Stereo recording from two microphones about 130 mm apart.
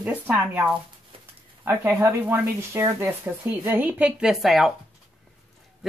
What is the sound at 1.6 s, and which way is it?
Speech, 15° right (ahead or behind).